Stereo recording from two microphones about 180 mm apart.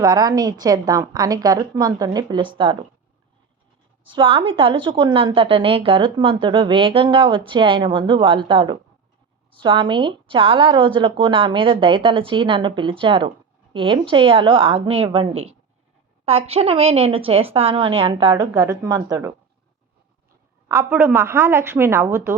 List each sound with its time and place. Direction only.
0.0 s a woman's voice: 20° right (ahead or behind)
4.1 s a woman's voice: 30° right (ahead or behind)
18.5 s a woman's voice: 15° right (ahead or behind)
20.7 s a woman's voice: 15° right (ahead or behind)